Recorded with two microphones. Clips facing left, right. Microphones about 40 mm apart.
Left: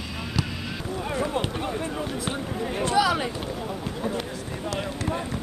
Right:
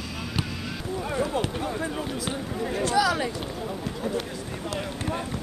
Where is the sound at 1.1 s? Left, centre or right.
Left.